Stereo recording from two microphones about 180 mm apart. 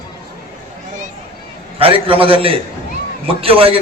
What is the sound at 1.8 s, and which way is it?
A man's voice, 30° right (ahead or behind).